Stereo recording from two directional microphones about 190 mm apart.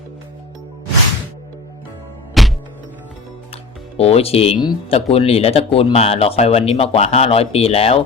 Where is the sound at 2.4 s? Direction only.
Centre (ahead or behind).